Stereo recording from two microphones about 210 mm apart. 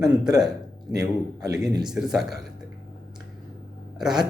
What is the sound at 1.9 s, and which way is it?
Speech, centre (ahead or behind).